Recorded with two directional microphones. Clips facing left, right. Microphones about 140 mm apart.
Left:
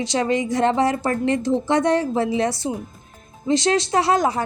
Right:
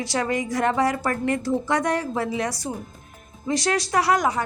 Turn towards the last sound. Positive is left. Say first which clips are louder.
# left 2 dB
turn(degrees=30)  # may be behind; listen again after turning